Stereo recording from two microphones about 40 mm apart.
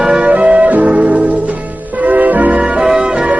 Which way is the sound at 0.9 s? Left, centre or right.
Right.